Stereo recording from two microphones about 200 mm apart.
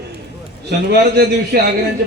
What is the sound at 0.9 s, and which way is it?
Speech, 55° right (ahead or behind).